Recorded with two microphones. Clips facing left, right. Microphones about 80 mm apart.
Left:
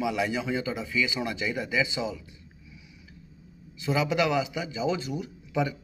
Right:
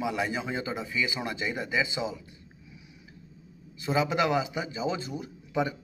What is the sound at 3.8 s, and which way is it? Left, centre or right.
Speech, right.